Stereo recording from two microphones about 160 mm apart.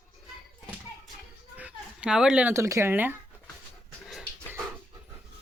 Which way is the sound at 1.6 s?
10° right (ahead or behind).